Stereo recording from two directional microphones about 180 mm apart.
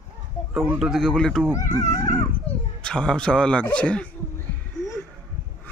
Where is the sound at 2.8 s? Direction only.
5° left (ahead or behind).